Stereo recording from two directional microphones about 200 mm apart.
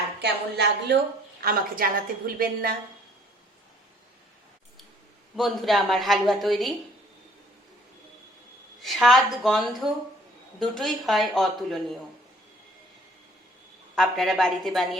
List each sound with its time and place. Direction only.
0.2 s a woman's voice: 55° right (ahead or behind)
5.4 s speech: centre (ahead or behind)
8.8 s speech: centre (ahead or behind)
13.9 s speech: centre (ahead or behind)